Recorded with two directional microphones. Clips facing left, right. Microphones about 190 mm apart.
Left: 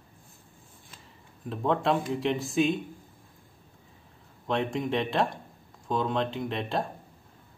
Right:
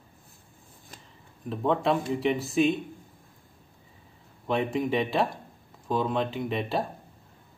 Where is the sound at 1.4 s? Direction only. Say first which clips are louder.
Right 1 dB; centre (ahead or behind).